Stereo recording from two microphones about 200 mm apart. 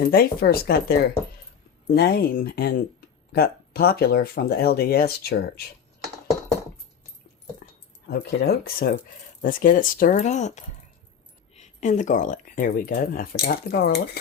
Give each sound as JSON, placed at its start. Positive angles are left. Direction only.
{"t": 0.1, "sound": "speech", "side_deg": 50}
{"t": 8.0, "sound": "speech", "side_deg": 55}